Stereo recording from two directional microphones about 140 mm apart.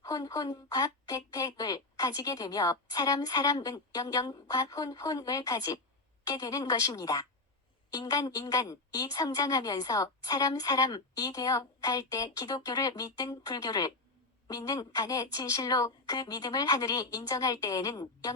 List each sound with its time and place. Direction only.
0.0 s a woman's voice: 25° left (ahead or behind)